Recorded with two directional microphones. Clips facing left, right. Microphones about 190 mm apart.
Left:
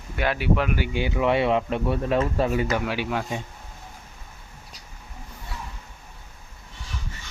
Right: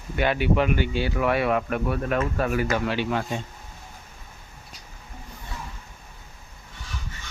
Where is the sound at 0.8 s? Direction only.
15° left (ahead or behind).